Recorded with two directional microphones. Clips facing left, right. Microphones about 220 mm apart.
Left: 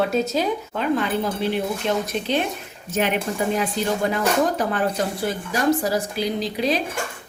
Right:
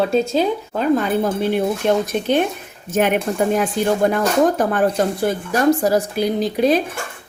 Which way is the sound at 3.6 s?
50° right (ahead or behind).